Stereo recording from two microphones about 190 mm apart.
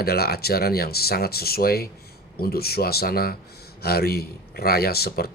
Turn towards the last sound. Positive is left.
turn(degrees=55)  # may be behind; listen again after turning